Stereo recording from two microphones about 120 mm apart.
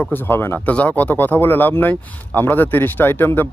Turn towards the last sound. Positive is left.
turn(degrees=15)  # may be behind; listen again after turning